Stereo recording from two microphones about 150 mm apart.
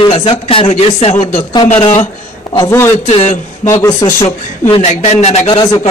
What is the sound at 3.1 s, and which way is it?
Speech, 45° left (ahead or behind).